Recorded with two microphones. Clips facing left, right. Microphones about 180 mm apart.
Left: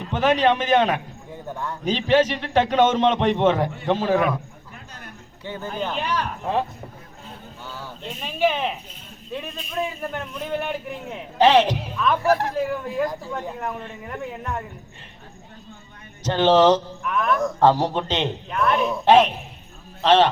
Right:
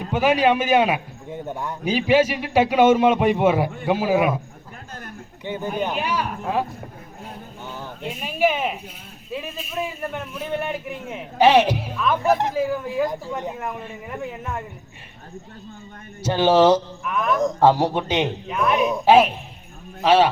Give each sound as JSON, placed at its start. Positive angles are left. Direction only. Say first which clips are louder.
{"t": 0.1, "sound": "a man's voice", "louder": "right 1 dB", "side_deg": -10}
{"t": 1.3, "sound": "a man's voice", "louder": "right 2 dB", "side_deg": -20}
{"t": 5.5, "sound": "a man's voice", "louder": "right 3 dB", "side_deg": -15}
{"t": 7.7, "sound": "a sound", "louder": "right 3 dB", "side_deg": -20}
{"t": 8.2, "sound": "a man's voice", "louder": "right 1 dB", "side_deg": -10}
{"t": 12.2, "sound": "speech", "louder": "right 1 dB", "side_deg": -20}
{"t": 12.5, "sound": "a man's voice", "louder": "right 2 dB", "side_deg": -5}
{"t": 13.1, "sound": "speech", "louder": "right 2 dB", "side_deg": -20}
{"t": 13.6, "sound": "a man's voice", "louder": "even", "side_deg": -10}
{"t": 16.2, "sound": "a man's voice", "louder": "even", "side_deg": -10}
{"t": 17.4, "sound": "a man's voice", "louder": "right 2 dB", "side_deg": -10}
{"t": 18.9, "sound": "a man's voice", "louder": "right 1 dB", "side_deg": -10}